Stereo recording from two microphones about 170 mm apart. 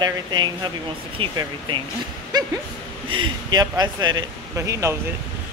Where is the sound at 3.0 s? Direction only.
30° right (ahead or behind).